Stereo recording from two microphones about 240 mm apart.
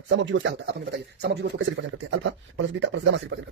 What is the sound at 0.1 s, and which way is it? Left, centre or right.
Speech, right.